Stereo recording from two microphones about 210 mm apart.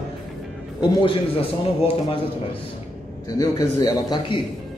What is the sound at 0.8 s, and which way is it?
Speech, 25° left (ahead or behind).